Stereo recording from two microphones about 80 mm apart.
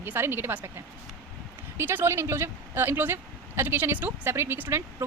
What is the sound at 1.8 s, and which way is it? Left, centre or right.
Speech, right.